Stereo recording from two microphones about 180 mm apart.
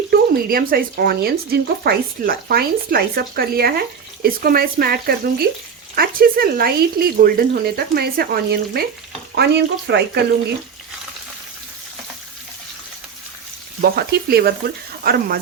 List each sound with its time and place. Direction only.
0.1 s speech: 55° right (ahead or behind)
9.3 s frying: 65° right (ahead or behind)
13.8 s speech: 60° right (ahead or behind)